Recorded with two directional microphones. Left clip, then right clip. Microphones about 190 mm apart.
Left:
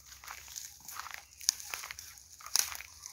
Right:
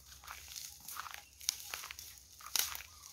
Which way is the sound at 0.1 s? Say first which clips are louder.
Left 3 dB; 55° left (ahead or behind).